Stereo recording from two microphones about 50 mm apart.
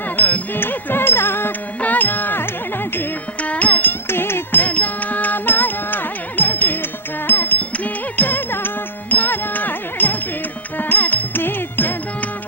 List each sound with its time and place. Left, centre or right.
0.2 s music: left
1.8 s carnatic music: left
3.4 s music: left
4.1 s music: left
4.6 s music: left